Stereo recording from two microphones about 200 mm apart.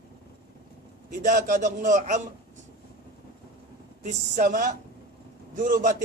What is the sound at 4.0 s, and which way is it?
A man's voice, 35° right (ahead or behind).